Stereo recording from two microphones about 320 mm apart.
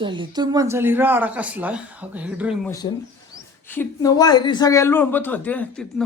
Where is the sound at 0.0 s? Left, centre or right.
Centre.